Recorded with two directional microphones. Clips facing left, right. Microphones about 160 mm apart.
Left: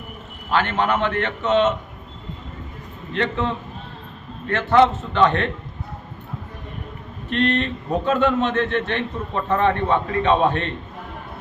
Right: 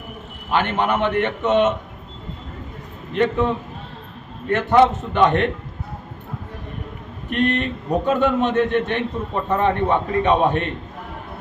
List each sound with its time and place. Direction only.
0.5 s a man's voice: 15° right (ahead or behind)
3.1 s a man's voice: 10° right (ahead or behind)
7.3 s a man's voice: 15° right (ahead or behind)